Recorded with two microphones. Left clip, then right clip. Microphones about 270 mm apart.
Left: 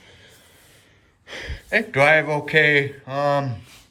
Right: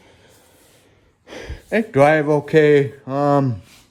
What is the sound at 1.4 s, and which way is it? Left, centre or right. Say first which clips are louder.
Speech: right 1 dB; right.